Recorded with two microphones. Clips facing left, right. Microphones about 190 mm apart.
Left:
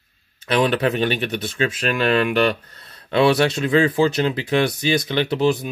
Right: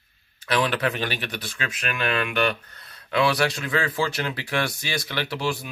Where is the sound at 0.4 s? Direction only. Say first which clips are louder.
Left 5 dB; 20° left (ahead or behind).